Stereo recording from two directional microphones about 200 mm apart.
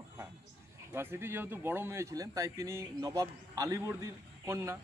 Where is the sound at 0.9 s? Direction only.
10° right (ahead or behind).